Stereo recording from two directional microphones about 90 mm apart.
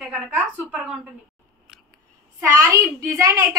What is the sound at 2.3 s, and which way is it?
A child's voice, 40° right (ahead or behind).